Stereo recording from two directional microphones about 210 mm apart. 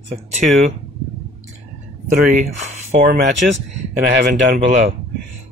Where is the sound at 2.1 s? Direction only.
40° right (ahead or behind).